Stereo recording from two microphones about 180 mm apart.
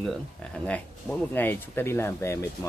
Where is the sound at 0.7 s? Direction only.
10° left (ahead or behind).